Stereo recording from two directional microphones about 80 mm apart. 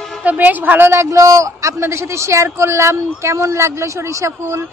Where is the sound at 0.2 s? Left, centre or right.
Right.